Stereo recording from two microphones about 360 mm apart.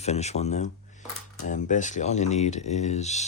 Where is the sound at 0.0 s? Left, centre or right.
Centre.